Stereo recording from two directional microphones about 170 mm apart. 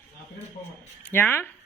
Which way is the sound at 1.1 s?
10° left (ahead or behind).